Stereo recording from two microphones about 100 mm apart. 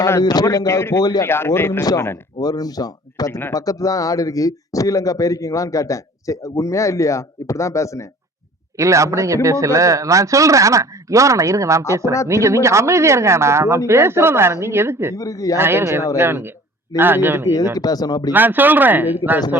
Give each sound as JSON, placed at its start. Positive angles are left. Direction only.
{"t": 0.2, "sound": "speech", "side_deg": 40}
{"t": 1.8, "sound": "speech", "side_deg": 40}
{"t": 8.8, "sound": "speech", "side_deg": -30}
{"t": 15.1, "sound": "speech", "side_deg": 35}
{"t": 15.5, "sound": "speech", "side_deg": -25}
{"t": 17.7, "sound": "speech", "side_deg": 40}
{"t": 18.3, "sound": "speech", "side_deg": -20}